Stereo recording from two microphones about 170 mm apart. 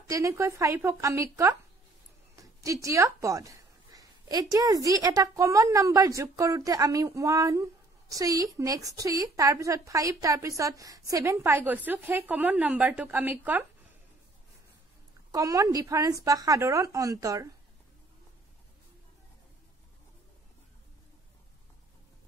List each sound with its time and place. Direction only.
0.1 s a woman's voice: 20° right (ahead or behind)
15.3 s a woman's voice: 20° right (ahead or behind)